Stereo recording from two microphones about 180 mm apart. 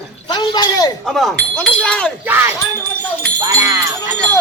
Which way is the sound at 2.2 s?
10° right (ahead or behind).